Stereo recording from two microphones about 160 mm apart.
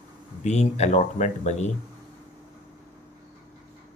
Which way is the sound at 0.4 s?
45° left (ahead or behind).